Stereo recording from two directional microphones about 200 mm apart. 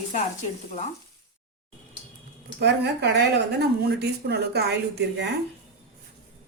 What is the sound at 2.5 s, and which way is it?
A woman's voice, 55° right (ahead or behind).